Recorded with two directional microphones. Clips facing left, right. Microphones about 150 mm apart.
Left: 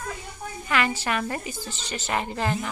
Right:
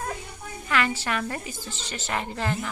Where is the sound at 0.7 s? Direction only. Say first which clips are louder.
Left 1 dB; 15° left (ahead or behind).